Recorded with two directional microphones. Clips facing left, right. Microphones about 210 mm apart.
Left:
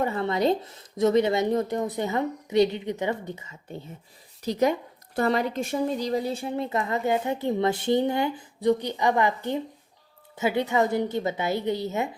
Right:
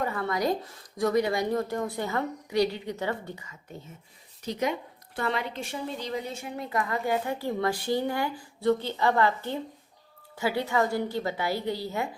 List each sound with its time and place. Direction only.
0.0 s a woman's voice: 25° left (ahead or behind)
5.1 s a woman's voice: 40° left (ahead or behind); by 12.0 s 20° left (ahead or behind)